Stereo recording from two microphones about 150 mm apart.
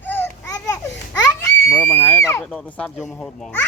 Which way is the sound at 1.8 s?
15° left (ahead or behind).